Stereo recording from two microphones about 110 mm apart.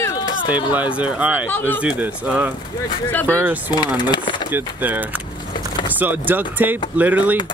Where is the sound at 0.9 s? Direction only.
10° right (ahead or behind).